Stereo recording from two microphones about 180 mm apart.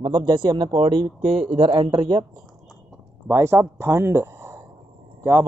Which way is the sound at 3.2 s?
15° right (ahead or behind).